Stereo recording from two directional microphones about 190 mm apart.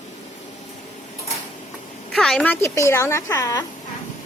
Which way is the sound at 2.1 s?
5° left (ahead or behind).